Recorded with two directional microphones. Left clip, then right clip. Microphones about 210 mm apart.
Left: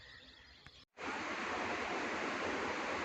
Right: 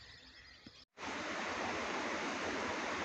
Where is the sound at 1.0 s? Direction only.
55° right (ahead or behind).